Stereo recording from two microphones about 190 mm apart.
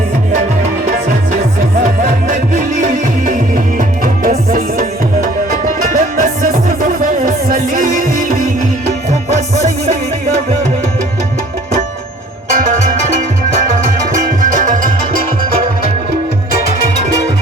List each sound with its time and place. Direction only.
0.6 s music: 40° right (ahead or behind)
9.6 s music: 40° right (ahead or behind)